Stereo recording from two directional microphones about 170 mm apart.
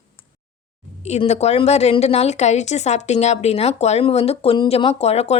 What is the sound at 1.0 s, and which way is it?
A woman's voice, 40° left (ahead or behind).